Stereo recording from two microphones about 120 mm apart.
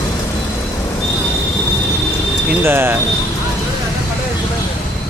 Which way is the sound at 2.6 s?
20° right (ahead or behind).